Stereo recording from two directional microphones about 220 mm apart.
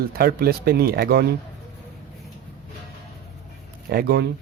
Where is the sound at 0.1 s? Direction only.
45° right (ahead or behind).